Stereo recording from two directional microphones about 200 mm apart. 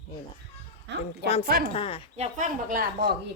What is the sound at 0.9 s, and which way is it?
Speech, 60° right (ahead or behind).